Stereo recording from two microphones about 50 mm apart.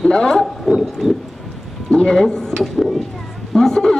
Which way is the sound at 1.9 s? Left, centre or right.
Centre.